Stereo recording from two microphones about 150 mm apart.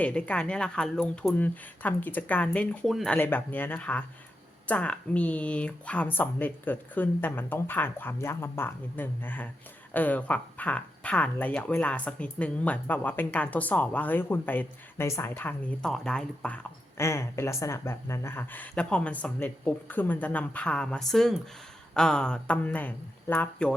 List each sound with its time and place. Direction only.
0.0 s speech: 10° left (ahead or behind)
3.2 s speech: 10° left (ahead or behind)
17.0 s speech: 20° left (ahead or behind)